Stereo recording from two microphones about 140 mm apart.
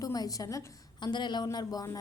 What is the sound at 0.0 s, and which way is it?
A woman's voice, 25° left (ahead or behind).